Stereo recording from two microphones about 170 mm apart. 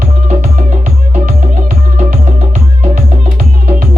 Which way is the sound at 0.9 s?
50° right (ahead or behind).